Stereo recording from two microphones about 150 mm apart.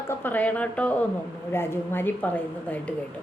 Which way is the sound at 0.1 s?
15° left (ahead or behind).